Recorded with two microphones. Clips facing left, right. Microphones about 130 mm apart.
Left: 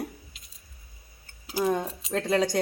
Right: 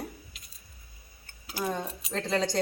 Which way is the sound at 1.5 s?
15° left (ahead or behind).